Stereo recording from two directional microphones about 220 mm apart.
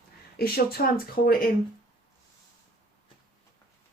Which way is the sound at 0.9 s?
40° left (ahead or behind).